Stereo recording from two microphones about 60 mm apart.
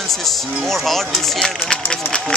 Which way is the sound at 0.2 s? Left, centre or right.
Centre.